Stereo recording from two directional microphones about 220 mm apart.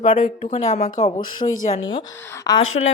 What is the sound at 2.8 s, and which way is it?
Speech, 35° left (ahead or behind).